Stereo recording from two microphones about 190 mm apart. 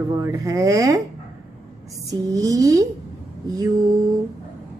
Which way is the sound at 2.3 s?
15° right (ahead or behind).